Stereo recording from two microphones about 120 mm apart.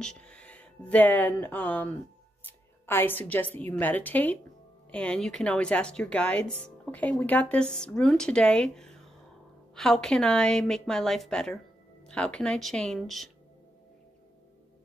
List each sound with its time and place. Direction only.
0.0 s a woman's voice: 5° left (ahead or behind)